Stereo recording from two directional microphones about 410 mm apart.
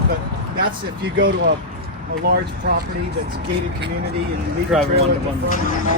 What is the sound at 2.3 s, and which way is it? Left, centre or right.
Speech, right.